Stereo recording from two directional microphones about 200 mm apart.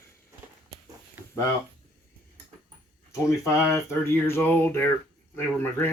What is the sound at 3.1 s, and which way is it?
Speech, 15° left (ahead or behind).